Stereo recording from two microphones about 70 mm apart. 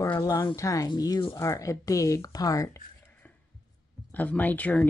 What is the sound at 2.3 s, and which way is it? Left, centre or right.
Speech, left.